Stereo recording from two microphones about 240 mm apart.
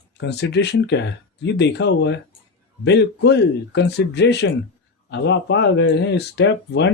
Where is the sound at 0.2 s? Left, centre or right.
Left.